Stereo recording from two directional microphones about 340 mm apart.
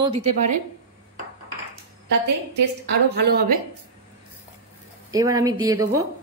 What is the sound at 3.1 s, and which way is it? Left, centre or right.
Speech, right.